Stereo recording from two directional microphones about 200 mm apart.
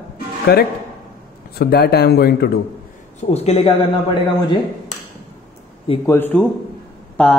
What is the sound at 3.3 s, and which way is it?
Speech, 30° left (ahead or behind).